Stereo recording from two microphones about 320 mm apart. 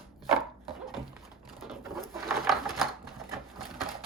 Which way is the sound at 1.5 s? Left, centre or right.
Centre.